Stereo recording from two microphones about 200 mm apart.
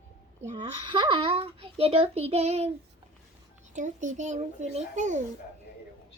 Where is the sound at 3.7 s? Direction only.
40° right (ahead or behind).